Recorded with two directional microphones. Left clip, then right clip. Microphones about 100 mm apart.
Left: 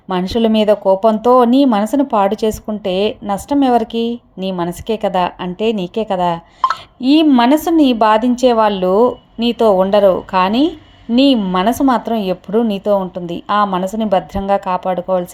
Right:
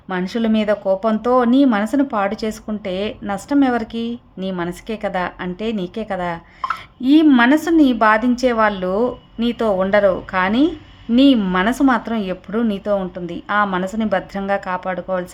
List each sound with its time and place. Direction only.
0.1 s a woman's voice: 35° left (ahead or behind)